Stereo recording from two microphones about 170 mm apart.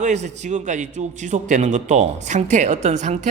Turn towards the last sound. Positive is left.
turn(degrees=-45)  # may be behind; listen again after turning